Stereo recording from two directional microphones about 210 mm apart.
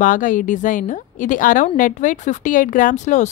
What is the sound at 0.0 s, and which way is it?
Speech, 40° left (ahead or behind).